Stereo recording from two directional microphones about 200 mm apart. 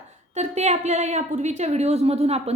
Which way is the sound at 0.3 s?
35° right (ahead or behind).